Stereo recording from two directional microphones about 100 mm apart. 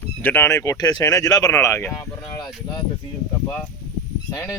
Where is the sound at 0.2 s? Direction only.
20° left (ahead or behind); by 1.5 s 35° left (ahead or behind).